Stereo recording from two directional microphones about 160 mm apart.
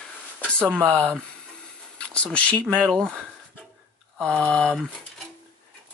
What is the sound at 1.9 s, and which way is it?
Speech, 5° left (ahead or behind).